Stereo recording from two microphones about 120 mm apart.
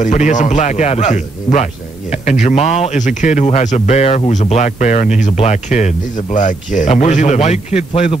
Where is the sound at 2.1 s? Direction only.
65° left (ahead or behind); by 5.1 s 85° left.